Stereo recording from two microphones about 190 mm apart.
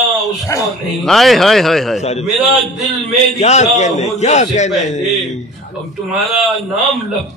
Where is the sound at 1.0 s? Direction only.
Centre (ahead or behind).